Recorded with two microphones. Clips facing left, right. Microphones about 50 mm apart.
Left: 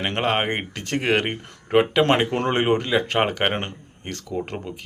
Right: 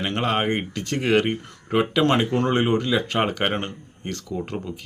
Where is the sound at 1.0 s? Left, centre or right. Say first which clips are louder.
Right 2 dB; left.